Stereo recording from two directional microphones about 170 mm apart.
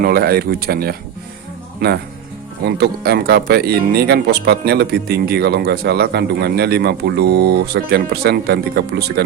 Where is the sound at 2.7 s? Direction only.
70° right (ahead or behind).